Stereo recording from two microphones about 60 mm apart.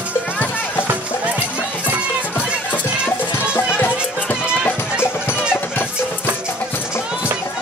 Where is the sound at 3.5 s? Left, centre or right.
Left.